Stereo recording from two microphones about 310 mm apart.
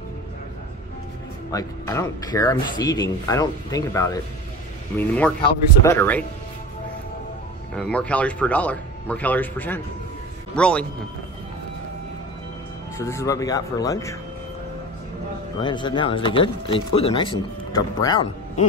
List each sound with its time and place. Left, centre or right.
1.5 s a man's voice: centre
7.7 s a man's voice: centre
12.9 s speech: centre
15.6 s speech: centre